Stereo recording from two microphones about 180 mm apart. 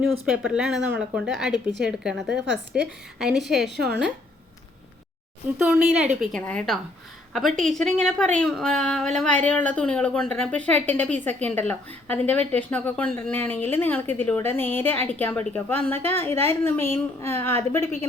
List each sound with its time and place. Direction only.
0.0 s a woman's voice: 5° right (ahead or behind)
3.7 s a woman's voice: 70° right (ahead or behind)
5.5 s a woman's voice: 5° right (ahead or behind)
6.4 s a woman's voice: 5° left (ahead or behind)